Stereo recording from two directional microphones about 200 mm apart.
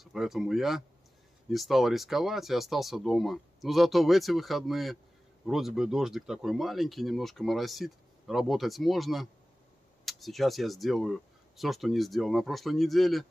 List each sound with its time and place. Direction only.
0.0 s speech: centre (ahead or behind)